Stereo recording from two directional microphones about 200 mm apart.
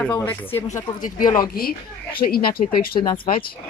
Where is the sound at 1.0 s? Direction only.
45° left (ahead or behind).